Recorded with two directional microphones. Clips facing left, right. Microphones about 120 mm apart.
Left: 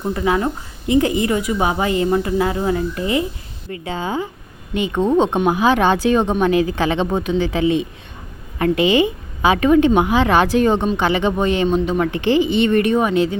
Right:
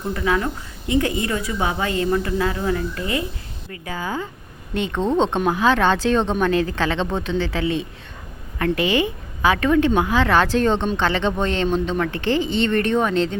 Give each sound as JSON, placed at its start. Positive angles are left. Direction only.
{"t": 0.1, "sound": "a woman's voice", "side_deg": 25}
{"t": 4.7, "sound": "a woman's voice", "side_deg": 10}